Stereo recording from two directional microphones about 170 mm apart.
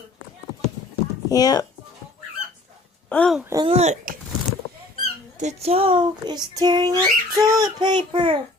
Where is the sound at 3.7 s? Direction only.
40° right (ahead or behind).